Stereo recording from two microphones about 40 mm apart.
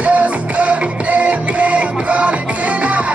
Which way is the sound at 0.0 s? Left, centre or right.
Right.